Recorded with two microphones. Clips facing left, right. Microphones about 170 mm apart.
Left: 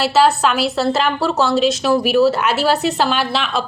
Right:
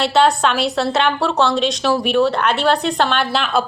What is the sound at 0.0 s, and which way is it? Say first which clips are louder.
A woman's voice: left 1 dB; 5° left (ahead or behind).